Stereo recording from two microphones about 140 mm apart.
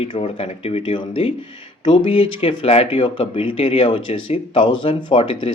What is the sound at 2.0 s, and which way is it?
A man's voice, 40° left (ahead or behind).